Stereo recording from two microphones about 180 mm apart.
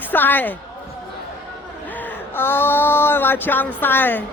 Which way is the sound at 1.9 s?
10° left (ahead or behind).